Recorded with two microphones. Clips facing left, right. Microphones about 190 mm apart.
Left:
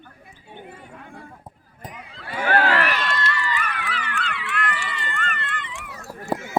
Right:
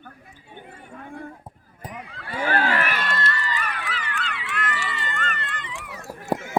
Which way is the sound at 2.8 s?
50° right (ahead or behind).